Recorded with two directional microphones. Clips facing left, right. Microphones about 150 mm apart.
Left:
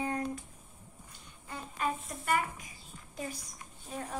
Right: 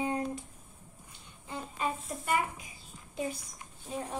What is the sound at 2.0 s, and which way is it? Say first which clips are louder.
Speech: right 1 dB; 10° right (ahead or behind).